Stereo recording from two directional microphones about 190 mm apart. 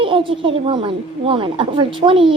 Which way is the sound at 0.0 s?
25° right (ahead or behind).